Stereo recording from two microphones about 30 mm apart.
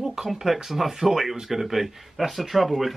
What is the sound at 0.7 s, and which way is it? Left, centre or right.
Speech, centre.